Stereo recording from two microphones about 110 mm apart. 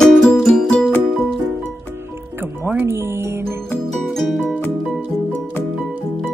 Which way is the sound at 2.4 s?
20° right (ahead or behind).